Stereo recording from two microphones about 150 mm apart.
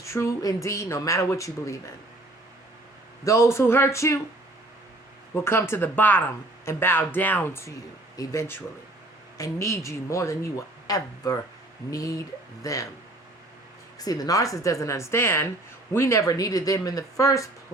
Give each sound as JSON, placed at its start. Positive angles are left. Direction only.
{"t": 0.0, "sound": "speech", "side_deg": 20}
{"t": 3.2, "sound": "speech", "side_deg": 20}
{"t": 5.3, "sound": "speech", "side_deg": 15}
{"t": 14.0, "sound": "speech", "side_deg": 25}